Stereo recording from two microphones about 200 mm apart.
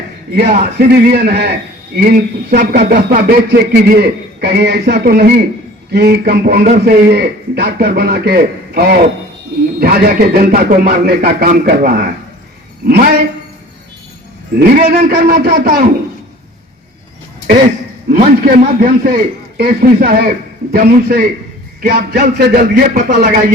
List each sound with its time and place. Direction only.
0.5 s speech: 50° right (ahead or behind)
14.6 s speech: 50° right (ahead or behind)
18.1 s speech: 45° right (ahead or behind)